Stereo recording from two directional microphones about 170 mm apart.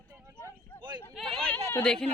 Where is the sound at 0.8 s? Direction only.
25° right (ahead or behind).